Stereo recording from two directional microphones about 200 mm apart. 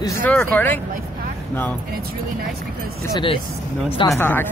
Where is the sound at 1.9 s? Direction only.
50° right (ahead or behind).